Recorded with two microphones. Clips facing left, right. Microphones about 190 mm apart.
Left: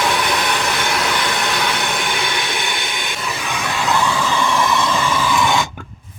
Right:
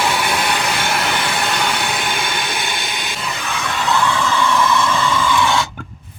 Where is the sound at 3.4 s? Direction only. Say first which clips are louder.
Even; 10° left (ahead or behind).